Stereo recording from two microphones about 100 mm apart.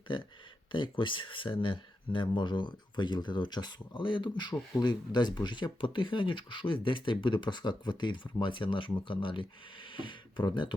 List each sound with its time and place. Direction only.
0.7 s speech: 55° left (ahead or behind)